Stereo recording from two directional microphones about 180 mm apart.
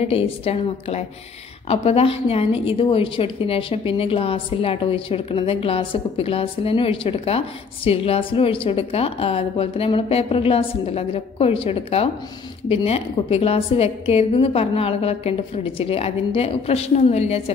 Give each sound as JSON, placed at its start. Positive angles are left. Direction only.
{"t": 0.0, "sound": "a woman's voice", "side_deg": 35}